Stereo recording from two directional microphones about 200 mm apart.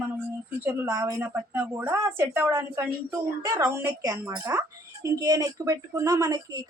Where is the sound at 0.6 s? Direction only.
15° right (ahead or behind).